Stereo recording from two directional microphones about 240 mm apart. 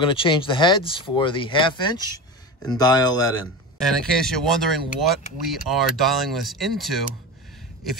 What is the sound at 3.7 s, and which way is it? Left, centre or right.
Speech, centre.